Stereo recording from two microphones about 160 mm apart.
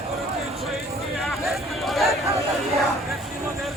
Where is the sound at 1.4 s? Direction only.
Centre (ahead or behind).